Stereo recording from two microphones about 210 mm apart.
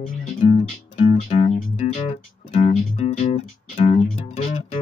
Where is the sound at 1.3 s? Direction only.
30° left (ahead or behind).